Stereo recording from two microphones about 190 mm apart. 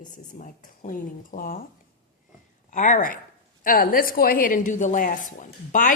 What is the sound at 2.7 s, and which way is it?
A woman's voice, 40° left (ahead or behind).